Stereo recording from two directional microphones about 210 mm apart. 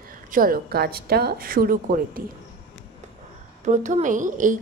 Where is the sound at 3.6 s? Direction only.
35° right (ahead or behind).